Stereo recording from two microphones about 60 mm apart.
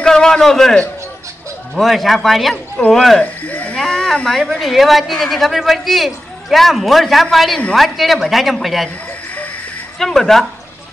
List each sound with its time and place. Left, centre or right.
0.0 s a sound: centre
1.8 s speech: centre
3.2 s speech: left
3.7 s speech: centre
9.9 s speech: centre